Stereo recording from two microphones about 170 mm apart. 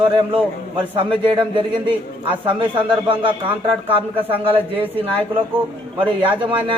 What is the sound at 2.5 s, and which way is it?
A man's voice, 30° right (ahead or behind).